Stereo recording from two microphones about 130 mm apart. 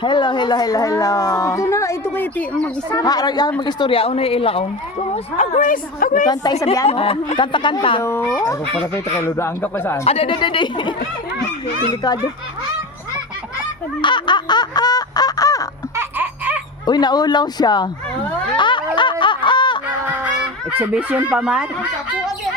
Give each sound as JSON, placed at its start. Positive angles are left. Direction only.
{"t": 0.0, "sound": "speech", "side_deg": 35}
{"t": 2.9, "sound": "speech", "side_deg": 30}
{"t": 6.2, "sound": "speech", "side_deg": 30}
{"t": 6.8, "sound": "speech", "side_deg": 45}
{"t": 8.0, "sound": "speech", "side_deg": 20}
{"t": 10.0, "sound": "speech", "side_deg": 50}
{"t": 14.0, "sound": "fowl", "side_deg": 35}
{"t": 16.0, "sound": "laughter", "side_deg": -15}
{"t": 16.8, "sound": "speech", "side_deg": 35}
{"t": 18.5, "sound": "boing", "side_deg": 40}
{"t": 19.2, "sound": "a sound", "side_deg": 40}
{"t": 20.1, "sound": "honk", "side_deg": -10}